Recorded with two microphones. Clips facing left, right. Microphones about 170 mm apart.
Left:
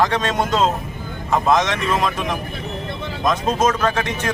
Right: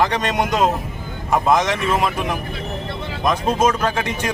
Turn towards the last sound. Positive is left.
turn(degrees=-10)  # may be behind; listen again after turning